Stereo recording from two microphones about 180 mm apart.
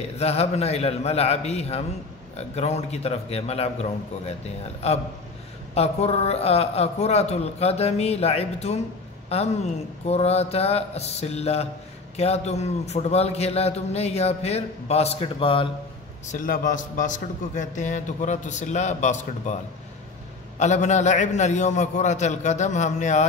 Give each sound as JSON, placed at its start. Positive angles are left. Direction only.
{"t": 0.2, "sound": "a man's voice", "side_deg": 35}
{"t": 16.3, "sound": "a man's voice", "side_deg": 50}